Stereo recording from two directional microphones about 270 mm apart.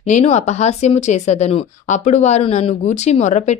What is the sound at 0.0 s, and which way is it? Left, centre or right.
Speech, left.